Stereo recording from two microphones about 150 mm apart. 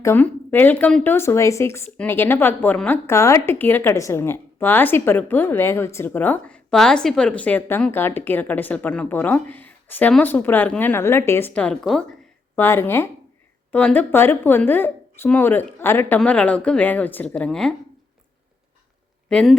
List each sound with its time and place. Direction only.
0.0 s speech: 15° left (ahead or behind)
12.5 s speech: 15° left (ahead or behind)
19.3 s speech: 5° left (ahead or behind)